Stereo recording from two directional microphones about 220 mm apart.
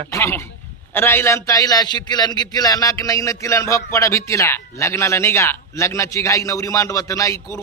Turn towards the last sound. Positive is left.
turn(degrees=15)  # may be behind; listen again after turning